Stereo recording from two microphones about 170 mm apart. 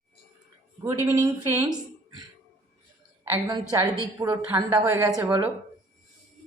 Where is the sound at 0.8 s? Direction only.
15° right (ahead or behind).